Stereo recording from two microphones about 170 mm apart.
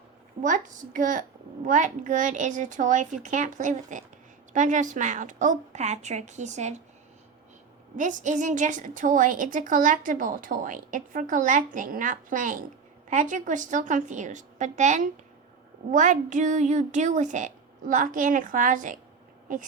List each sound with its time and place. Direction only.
0.4 s a woman's voice: 50° right (ahead or behind)
7.9 s a woman's voice: 45° right (ahead or behind)